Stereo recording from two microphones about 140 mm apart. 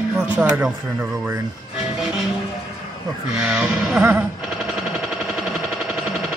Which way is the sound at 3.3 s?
5° right (ahead or behind).